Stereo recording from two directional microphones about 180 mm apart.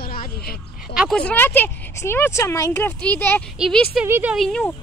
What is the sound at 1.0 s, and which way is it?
Speech, 5° left (ahead or behind).